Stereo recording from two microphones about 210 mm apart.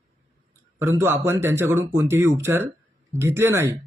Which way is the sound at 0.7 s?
15° right (ahead or behind).